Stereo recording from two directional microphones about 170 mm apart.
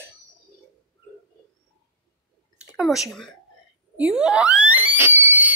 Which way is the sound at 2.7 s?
5° right (ahead or behind).